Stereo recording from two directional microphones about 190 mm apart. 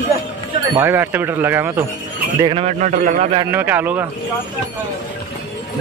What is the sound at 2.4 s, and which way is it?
Speech, 35° right (ahead or behind).